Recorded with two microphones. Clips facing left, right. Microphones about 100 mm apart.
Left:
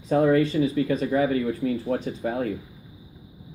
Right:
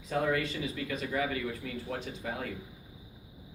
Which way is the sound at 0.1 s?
35° left (ahead or behind).